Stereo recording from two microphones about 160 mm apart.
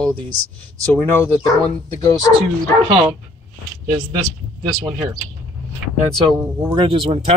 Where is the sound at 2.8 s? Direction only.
35° right (ahead or behind).